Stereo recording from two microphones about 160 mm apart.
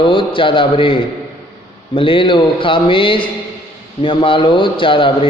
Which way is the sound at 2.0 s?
30° left (ahead or behind).